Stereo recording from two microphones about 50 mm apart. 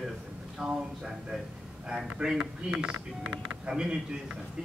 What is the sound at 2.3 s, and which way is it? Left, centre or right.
Speech, centre.